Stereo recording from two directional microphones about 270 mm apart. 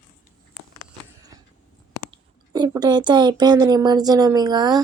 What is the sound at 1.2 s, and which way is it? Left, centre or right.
Creak, centre.